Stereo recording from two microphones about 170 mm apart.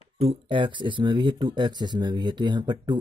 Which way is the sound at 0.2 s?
35° right (ahead or behind).